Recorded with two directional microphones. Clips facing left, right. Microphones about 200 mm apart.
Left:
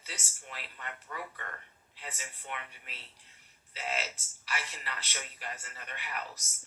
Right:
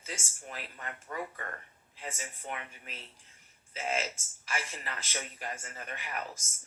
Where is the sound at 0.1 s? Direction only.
45° right (ahead or behind).